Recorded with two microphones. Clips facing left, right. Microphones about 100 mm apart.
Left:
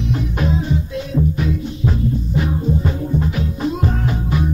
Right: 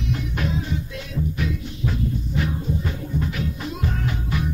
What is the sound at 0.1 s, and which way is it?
Music, 30° left (ahead or behind).